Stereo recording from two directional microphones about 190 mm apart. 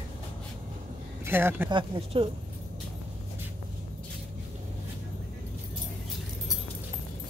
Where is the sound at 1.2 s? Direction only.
10° right (ahead or behind).